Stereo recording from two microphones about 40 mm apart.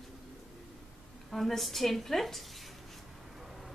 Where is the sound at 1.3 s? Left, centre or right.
Centre.